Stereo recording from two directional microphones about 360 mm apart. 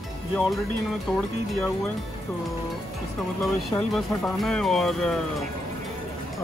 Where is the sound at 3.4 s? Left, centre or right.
Centre.